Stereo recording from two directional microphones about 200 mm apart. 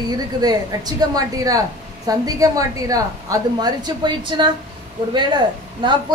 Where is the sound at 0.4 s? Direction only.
20° right (ahead or behind).